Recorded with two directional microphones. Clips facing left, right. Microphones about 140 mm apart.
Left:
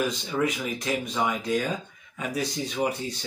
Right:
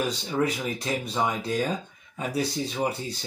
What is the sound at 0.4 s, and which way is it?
Speech, 30° right (ahead or behind).